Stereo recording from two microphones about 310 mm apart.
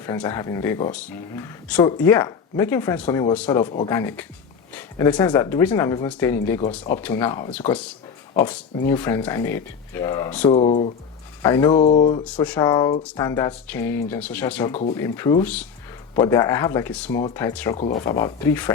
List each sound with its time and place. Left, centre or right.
0.0 s speech: centre
8.9 s speech: centre
10.5 s speech: left
11.4 s speech: centre
11.8 s speech: left
12.2 s speech: centre
17.7 s speech: left; by 18.7 s centre